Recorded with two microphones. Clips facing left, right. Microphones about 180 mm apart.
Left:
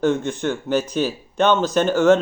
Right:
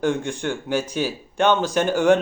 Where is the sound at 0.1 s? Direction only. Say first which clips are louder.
Left 3 dB; 15° right (ahead or behind).